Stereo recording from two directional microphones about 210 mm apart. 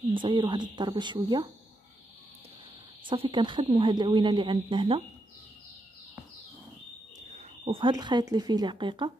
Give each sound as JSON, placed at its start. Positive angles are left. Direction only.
{"t": 0.1, "sound": "speech", "side_deg": -25}
{"t": 3.1, "sound": "speech", "side_deg": -25}
{"t": 7.3, "sound": "speech", "side_deg": -25}